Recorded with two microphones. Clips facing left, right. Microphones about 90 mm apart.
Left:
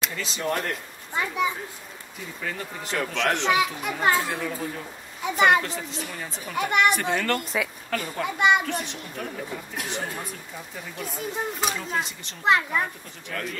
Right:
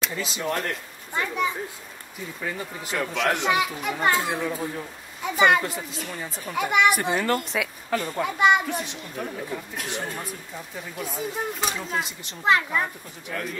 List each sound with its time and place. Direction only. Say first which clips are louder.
0.1 s a child's voice: even; 5° right (ahead or behind)
2.4 s a child's voice: right 1 dB; 10° right (ahead or behind)
4.2 s speech: right 2 dB; 10° right (ahead or behind)
5.2 s a child's voice: even; centre (ahead or behind)